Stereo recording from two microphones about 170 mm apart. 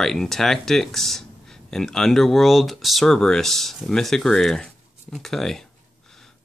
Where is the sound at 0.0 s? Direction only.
Centre (ahead or behind).